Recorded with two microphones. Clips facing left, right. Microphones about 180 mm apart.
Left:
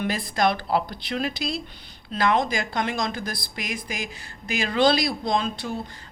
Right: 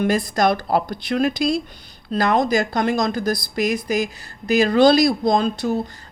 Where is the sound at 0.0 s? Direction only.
45° right (ahead or behind).